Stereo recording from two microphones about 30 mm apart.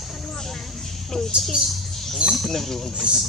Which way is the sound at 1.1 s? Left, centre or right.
Left.